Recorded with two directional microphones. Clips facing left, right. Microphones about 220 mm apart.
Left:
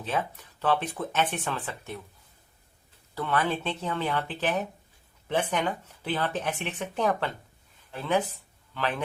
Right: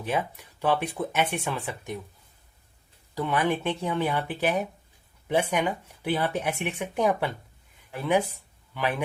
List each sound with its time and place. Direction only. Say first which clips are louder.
0.0 s speech: right 2 dB; 10° right (ahead or behind)
3.2 s speech: right 2 dB; 15° right (ahead or behind)